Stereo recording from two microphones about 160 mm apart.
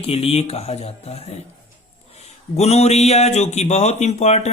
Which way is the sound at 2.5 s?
40° left (ahead or behind).